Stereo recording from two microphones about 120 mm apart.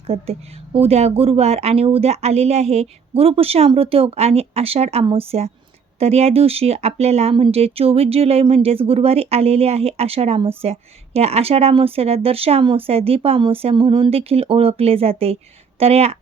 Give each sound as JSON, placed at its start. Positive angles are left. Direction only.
{"t": 0.1, "sound": "speech", "side_deg": -55}